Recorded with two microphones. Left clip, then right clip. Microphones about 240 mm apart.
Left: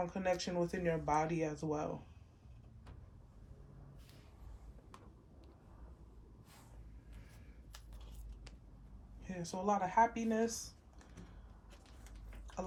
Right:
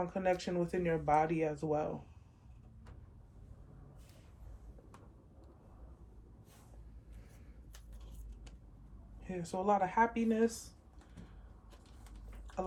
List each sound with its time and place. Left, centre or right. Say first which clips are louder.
0.0 s speech: right 3 dB; left
9.4 s speech: right 4 dB; left